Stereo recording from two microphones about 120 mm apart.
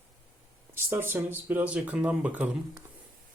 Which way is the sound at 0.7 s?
20° right (ahead or behind).